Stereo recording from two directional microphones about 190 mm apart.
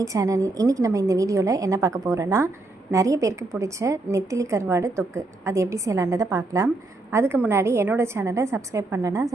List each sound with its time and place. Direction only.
0.0 s a woman's voice: 15° right (ahead or behind)